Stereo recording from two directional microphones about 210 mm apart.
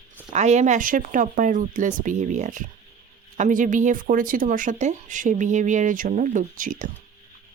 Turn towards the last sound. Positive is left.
turn(degrees=-40)  # may be behind; listen again after turning